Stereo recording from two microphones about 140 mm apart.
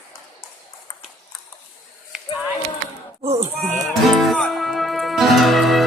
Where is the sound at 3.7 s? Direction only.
Centre (ahead or behind).